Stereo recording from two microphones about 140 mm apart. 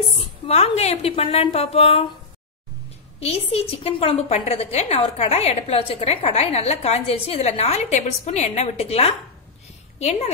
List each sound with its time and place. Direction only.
0.5 s a woman's voice: 50° left (ahead or behind)
3.2 s a woman's voice: 45° left (ahead or behind)